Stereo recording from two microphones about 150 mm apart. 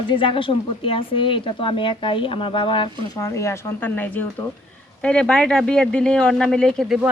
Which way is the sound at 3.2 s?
20° left (ahead or behind).